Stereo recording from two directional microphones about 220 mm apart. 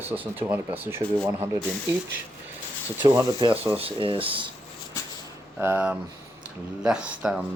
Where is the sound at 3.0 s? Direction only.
20° right (ahead or behind).